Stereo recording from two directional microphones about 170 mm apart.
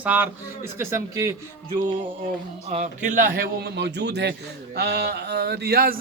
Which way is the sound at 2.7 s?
45° right (ahead or behind).